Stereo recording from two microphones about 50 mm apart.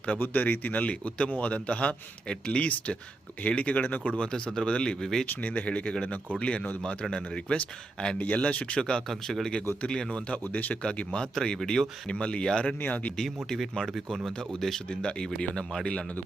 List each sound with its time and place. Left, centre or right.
0.2 s a man's voice: left
4.2 s a man's voice: centre
5.2 s a man's voice: left
10.4 s speech: left
10.9 s a man's voice: centre
12.8 s speech: left
13.1 s speech: centre
14.3 s speech: centre